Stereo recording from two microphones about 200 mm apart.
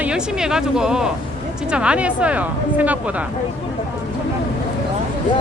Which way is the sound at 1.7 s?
5° right (ahead or behind).